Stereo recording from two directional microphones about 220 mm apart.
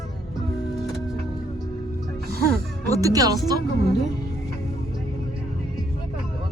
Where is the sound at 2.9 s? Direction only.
15° right (ahead or behind).